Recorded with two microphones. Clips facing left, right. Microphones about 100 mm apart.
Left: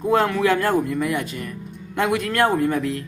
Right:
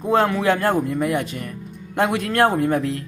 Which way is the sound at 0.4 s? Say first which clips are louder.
Even; 35° right (ahead or behind).